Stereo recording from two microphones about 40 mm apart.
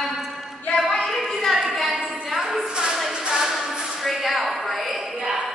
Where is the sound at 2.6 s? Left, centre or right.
Centre.